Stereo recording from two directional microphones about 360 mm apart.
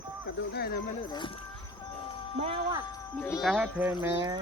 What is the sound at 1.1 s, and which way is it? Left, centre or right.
Speech, centre.